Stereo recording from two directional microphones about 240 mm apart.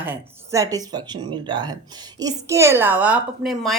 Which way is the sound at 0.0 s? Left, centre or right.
Centre.